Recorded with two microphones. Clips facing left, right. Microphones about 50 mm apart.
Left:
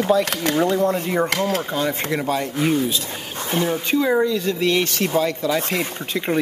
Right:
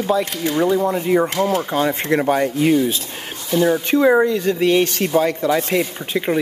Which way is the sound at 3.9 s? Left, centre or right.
Right.